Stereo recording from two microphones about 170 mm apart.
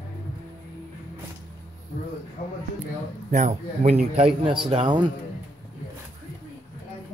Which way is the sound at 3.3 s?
45° right (ahead or behind).